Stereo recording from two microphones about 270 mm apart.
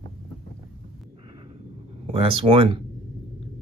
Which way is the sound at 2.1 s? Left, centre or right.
Centre.